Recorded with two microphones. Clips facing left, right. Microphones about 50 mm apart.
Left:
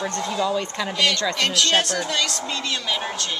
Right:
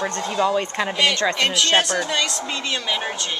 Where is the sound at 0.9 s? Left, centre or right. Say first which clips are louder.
Right 1 dB; centre.